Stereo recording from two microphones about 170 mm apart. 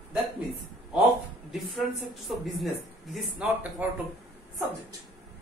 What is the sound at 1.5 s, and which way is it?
A woman's voice, centre (ahead or behind).